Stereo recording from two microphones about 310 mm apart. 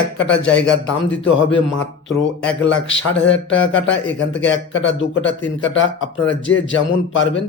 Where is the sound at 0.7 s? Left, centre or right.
Left.